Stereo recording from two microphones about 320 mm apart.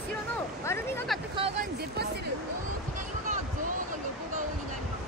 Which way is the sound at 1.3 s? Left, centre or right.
Centre.